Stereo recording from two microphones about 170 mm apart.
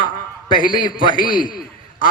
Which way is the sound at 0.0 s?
25° left (ahead or behind).